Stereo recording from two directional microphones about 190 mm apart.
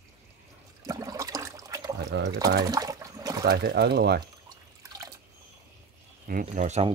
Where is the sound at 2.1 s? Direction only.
65° right (ahead or behind).